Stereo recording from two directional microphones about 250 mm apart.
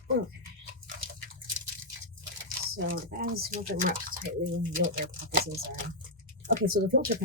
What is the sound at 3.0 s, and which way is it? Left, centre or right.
Speech, right.